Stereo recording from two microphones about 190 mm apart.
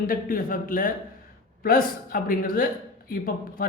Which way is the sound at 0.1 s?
50° left (ahead or behind).